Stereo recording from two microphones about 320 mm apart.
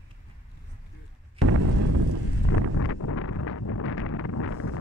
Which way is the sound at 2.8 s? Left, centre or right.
Left.